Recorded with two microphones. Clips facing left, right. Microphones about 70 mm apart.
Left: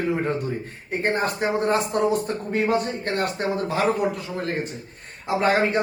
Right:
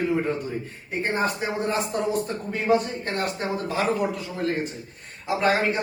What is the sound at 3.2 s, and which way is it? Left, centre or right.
A man's voice, left.